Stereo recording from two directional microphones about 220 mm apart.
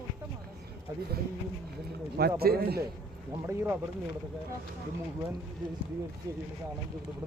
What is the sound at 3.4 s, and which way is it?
Speech, 10° right (ahead or behind).